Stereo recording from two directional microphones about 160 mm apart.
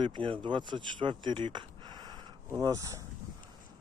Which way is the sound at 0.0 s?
30° right (ahead or behind).